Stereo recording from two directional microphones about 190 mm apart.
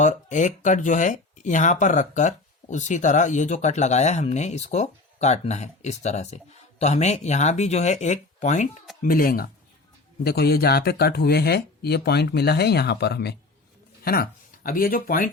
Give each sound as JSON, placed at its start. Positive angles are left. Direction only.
{"t": 0.0, "sound": "speech", "side_deg": 40}